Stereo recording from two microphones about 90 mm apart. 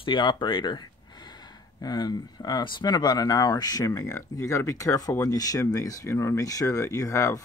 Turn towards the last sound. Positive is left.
turn(degrees=35)  # may be behind; listen again after turning